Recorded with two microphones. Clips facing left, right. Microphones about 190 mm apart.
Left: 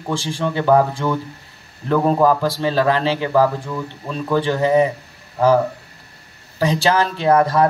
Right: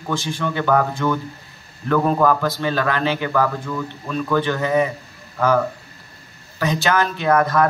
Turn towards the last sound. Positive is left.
turn(degrees=30)  # may be behind; listen again after turning